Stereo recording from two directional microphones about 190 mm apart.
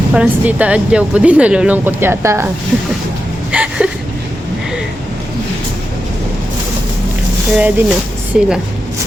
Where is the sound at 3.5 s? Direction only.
5° right (ahead or behind).